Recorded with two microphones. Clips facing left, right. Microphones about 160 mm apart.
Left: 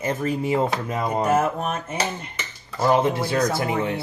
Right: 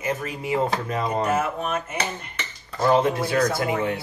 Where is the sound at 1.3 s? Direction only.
40° left (ahead or behind).